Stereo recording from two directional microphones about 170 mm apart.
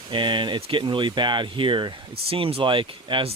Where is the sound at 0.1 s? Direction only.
25° right (ahead or behind).